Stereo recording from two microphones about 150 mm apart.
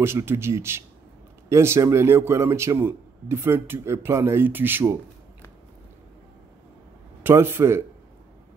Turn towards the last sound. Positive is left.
turn(degrees=-15)  # may be behind; listen again after turning